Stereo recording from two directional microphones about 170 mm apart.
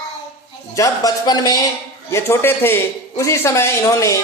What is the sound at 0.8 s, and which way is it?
A man's voice, 25° left (ahead or behind).